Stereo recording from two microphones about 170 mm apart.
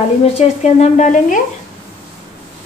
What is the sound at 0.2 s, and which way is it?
A woman's voice, 40° left (ahead or behind).